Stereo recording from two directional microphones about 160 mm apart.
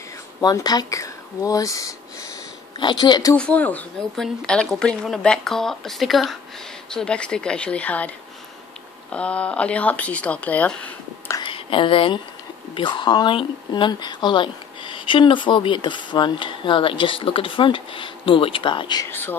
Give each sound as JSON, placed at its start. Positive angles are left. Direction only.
{"t": 0.4, "sound": "speech", "side_deg": 25}
{"t": 3.3, "sound": "a woman's voice", "side_deg": 10}
{"t": 9.1, "sound": "speech", "side_deg": 10}
{"t": 11.3, "sound": "a sound", "side_deg": 35}
{"t": 12.7, "sound": "speech", "side_deg": 30}
{"t": 19.0, "sound": "speech", "side_deg": 15}